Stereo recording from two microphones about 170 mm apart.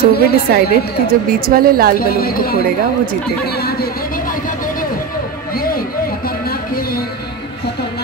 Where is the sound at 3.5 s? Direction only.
65° left (ahead or behind).